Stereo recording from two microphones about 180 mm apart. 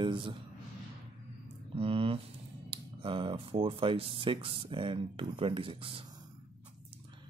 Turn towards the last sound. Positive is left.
turn(degrees=-30)  # may be behind; listen again after turning